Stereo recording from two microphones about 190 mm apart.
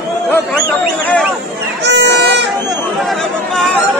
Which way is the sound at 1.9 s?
65° right (ahead or behind).